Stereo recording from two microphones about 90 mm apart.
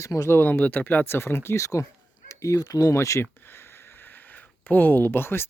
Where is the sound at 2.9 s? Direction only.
30° left (ahead or behind).